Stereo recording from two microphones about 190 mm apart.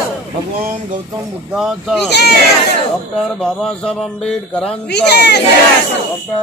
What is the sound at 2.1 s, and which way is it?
Speech, 60° left (ahead or behind).